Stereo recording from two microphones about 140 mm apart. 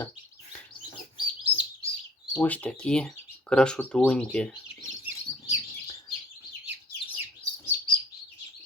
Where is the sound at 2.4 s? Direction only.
10° left (ahead or behind).